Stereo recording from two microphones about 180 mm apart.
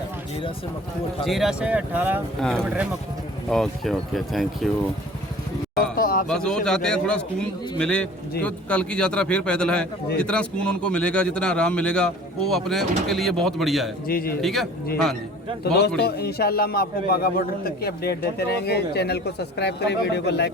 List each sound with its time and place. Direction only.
1.2 s speech: centre (ahead or behind)
2.4 s a man's voice: 5° left (ahead or behind)
6.0 s a sound: 50° left (ahead or behind)
6.2 s a man's voice: 5° left (ahead or behind)
14.1 s a man's voice: 55° left (ahead or behind)
14.4 s a man's voice: centre (ahead or behind)
15.6 s a man's voice: 65° left (ahead or behind)